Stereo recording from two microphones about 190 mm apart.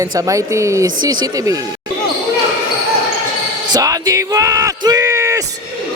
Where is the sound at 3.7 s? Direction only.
20° right (ahead or behind).